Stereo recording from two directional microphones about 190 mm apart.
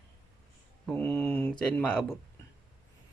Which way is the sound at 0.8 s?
5° left (ahead or behind).